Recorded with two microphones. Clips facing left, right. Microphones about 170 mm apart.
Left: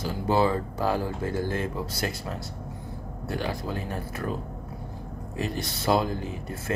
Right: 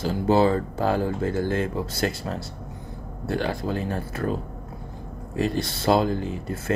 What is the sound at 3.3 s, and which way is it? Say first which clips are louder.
Speech: right 5 dB; 30° right (ahead or behind).